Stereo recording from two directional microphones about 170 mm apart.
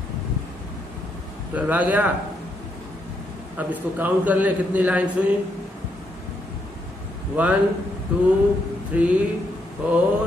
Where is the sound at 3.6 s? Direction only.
10° right (ahead or behind).